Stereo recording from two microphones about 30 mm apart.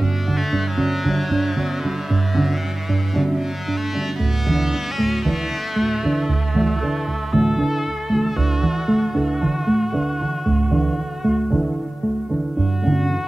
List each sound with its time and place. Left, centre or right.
0.5 s music: centre
4.5 s music: centre
12.8 s music: centre